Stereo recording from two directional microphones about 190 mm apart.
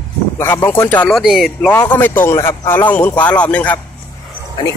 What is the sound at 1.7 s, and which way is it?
Speech, 10° left (ahead or behind).